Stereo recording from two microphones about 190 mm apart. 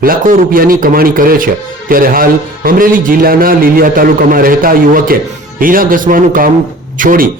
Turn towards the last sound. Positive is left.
turn(degrees=-45)  # may be behind; listen again after turning